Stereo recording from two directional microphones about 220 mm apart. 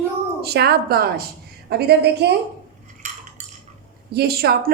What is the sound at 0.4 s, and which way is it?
Speech, 45° right (ahead or behind).